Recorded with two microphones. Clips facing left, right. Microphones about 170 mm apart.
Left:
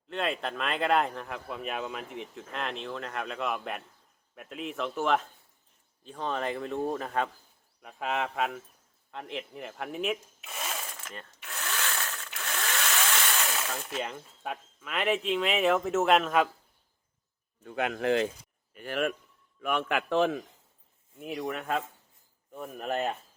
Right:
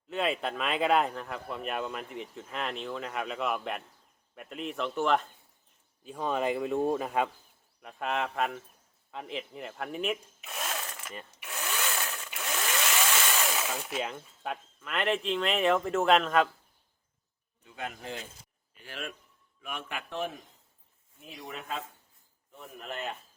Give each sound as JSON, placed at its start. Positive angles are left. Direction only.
{"t": 0.1, "sound": "speech", "side_deg": -5}
{"t": 7.8, "sound": "speech", "side_deg": 0}
{"t": 11.0, "sound": "tools", "side_deg": -5}
{"t": 11.3, "sound": "power tool", "side_deg": -15}
{"t": 17.6, "sound": "speech", "side_deg": 55}
{"t": 17.8, "sound": "speech", "side_deg": 80}
{"t": 18.7, "sound": "a man's voice", "side_deg": 55}
{"t": 21.2, "sound": "speech", "side_deg": 65}